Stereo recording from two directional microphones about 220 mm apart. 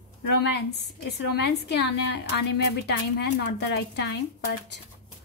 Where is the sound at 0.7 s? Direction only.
50° left (ahead or behind).